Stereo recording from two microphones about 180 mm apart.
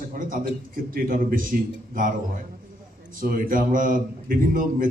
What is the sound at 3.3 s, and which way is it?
A man's voice, 50° right (ahead or behind).